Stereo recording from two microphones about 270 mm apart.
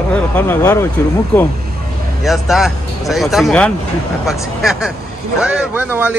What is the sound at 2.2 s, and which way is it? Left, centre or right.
A man's voice, centre.